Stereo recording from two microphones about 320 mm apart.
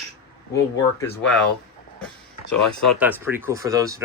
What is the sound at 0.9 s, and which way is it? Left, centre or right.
Speech, centre.